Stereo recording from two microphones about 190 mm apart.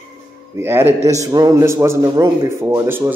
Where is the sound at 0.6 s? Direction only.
10° right (ahead or behind).